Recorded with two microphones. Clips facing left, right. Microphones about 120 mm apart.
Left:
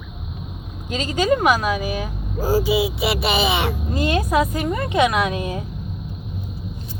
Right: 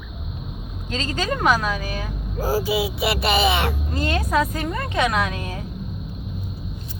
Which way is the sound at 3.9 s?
15° left (ahead or behind).